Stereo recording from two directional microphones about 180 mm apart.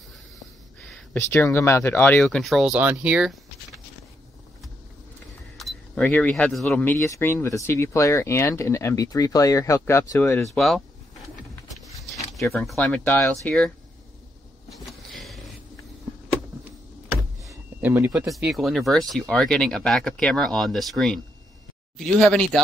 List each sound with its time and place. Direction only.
0.7 s speech: 10° left (ahead or behind)
5.6 s keys jangling: centre (ahead or behind)
6.0 s speech: 10° left (ahead or behind)
10.5 s speech: centre (ahead or behind)
11.7 s a sound: centre (ahead or behind)
12.5 s speech: 5° left (ahead or behind)
14.7 s vehicle: centre (ahead or behind)
17.7 s speech: 10° right (ahead or behind)